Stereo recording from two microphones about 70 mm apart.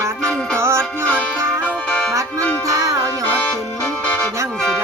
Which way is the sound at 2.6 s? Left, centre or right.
Right.